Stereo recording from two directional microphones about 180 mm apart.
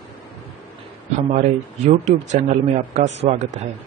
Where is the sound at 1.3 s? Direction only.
40° right (ahead or behind).